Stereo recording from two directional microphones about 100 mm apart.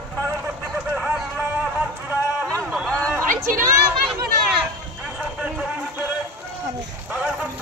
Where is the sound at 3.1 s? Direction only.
25° right (ahead or behind).